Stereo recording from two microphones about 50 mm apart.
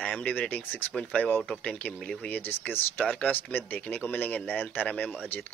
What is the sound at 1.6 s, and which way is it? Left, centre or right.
Speech, left.